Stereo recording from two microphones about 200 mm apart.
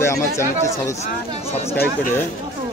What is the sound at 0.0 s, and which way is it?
Speech, 15° left (ahead or behind).